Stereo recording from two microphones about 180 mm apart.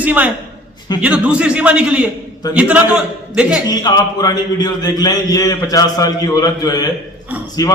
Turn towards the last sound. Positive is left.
turn(degrees=20)  # may be behind; listen again after turning